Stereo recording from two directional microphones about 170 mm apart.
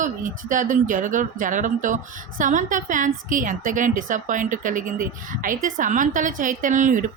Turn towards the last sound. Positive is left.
turn(degrees=-50)  # may be behind; listen again after turning